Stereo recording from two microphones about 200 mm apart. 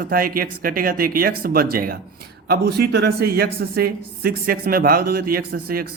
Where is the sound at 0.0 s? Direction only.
45° right (ahead or behind).